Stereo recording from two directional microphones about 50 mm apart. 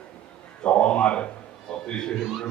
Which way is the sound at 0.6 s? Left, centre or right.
Left.